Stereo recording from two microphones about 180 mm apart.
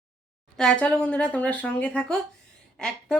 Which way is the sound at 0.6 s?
5° left (ahead or behind).